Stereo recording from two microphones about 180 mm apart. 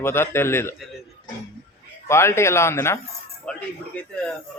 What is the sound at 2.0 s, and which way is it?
A man's voice, 15° left (ahead or behind).